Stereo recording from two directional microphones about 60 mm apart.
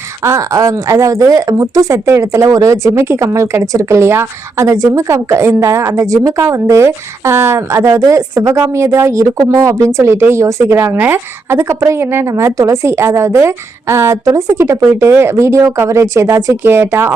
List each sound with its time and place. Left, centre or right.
0.3 s speech: right
6.1 s a woman's voice: right
10.9 s a woman's voice: right
12.5 s a woman's voice: right